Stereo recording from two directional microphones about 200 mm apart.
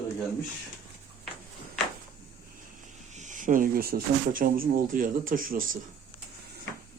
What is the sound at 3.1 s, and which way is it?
Speech, 40° right (ahead or behind).